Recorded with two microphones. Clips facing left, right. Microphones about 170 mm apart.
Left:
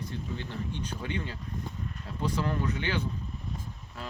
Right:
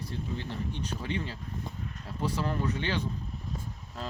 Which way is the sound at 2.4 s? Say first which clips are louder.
Even; 20° right (ahead or behind).